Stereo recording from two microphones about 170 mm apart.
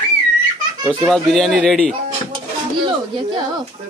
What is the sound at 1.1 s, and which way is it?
Speech, centre (ahead or behind).